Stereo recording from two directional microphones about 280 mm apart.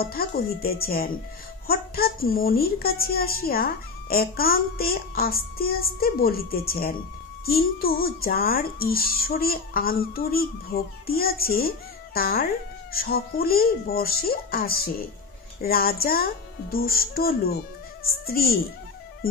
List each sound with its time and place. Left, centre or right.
0.0 s a woman's voice: left